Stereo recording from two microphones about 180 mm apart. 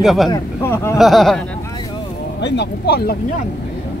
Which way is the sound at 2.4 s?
75° left (ahead or behind).